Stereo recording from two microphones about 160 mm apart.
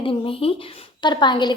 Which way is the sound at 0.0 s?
35° left (ahead or behind).